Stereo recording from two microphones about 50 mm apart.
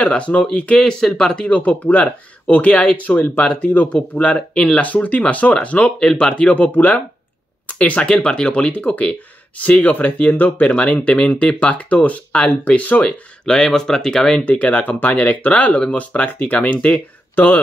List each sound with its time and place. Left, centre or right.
0.0 s speech: left
1.5 s speech: left
4.8 s speech: left
6.5 s speech: left
13.5 s speech: centre
14.4 s speech: left